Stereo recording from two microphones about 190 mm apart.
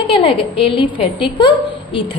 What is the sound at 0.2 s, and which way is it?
A woman's voice, 30° left (ahead or behind).